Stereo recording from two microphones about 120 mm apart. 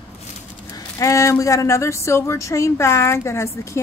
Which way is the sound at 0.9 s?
25° left (ahead or behind).